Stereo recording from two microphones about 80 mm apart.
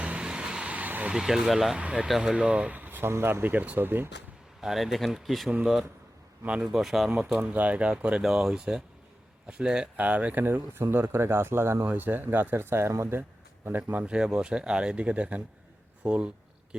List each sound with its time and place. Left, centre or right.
0.0 s vehicle: centre
1.1 s speech: centre; by 4.1 s right
4.6 s speech: centre
6.6 s speech: centre
7.4 s speech: centre
13.9 s speech: centre